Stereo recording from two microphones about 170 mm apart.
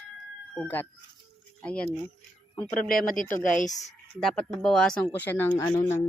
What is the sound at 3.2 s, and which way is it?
Speech, 10° left (ahead or behind).